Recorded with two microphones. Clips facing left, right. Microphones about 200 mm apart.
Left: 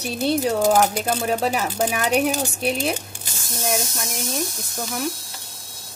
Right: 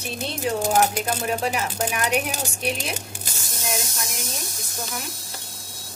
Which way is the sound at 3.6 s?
45° left (ahead or behind).